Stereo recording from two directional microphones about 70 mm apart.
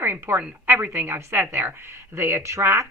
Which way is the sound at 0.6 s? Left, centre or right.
Right.